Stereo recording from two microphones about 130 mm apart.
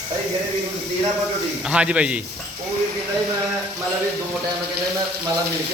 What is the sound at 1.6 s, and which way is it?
Speech, 10° right (ahead or behind).